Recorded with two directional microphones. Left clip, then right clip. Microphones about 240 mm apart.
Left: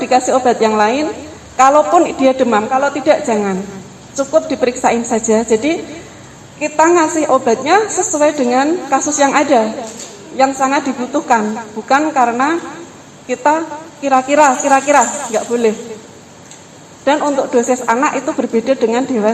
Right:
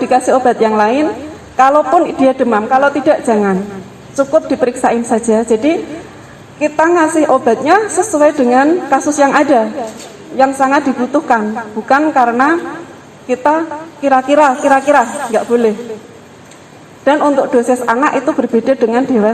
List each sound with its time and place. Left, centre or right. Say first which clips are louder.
0.0 s a woman's voice: right 2 dB; right
17.1 s a woman's voice: right 3 dB; right